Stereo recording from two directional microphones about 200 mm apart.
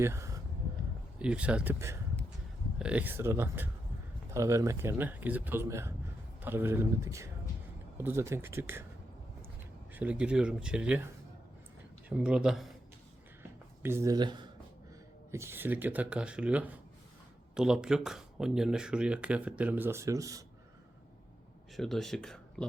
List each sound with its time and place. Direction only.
0.0 s a sound: 15° right (ahead or behind)
1.2 s speech: 5° right (ahead or behind)
9.9 s speech: 10° right (ahead or behind)
13.8 s speech: 15° right (ahead or behind)
21.8 s speech: centre (ahead or behind)